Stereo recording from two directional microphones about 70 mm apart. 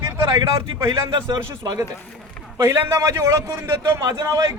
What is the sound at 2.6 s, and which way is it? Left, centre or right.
A man's voice, right.